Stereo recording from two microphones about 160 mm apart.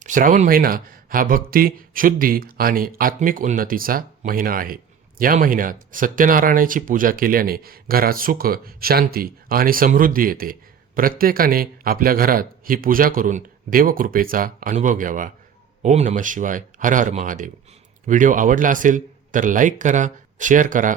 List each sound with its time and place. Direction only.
0.0 s speech: 55° right (ahead or behind)